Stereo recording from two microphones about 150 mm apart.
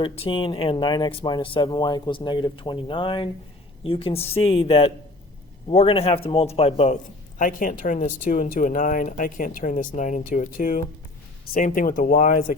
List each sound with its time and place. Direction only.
0.0 s a man's voice: 35° left (ahead or behind); by 12.5 s 60° left (ahead or behind)